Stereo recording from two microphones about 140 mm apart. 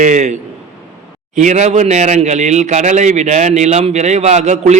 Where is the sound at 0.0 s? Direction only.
60° right (ahead or behind).